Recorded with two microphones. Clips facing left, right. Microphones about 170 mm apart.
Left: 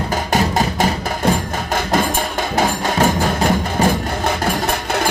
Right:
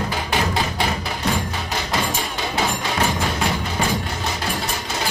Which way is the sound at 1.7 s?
50° left (ahead or behind).